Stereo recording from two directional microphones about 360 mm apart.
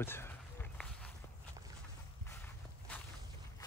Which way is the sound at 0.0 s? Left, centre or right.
Centre.